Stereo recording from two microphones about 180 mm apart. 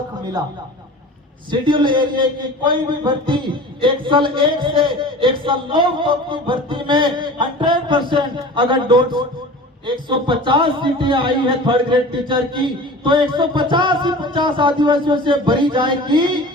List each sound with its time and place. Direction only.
1.5 s a man's voice: 25° right (ahead or behind)